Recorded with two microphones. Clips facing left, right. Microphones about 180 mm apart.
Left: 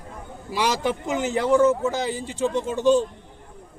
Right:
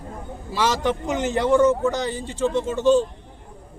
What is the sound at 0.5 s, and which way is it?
A man's voice, 15° left (ahead or behind).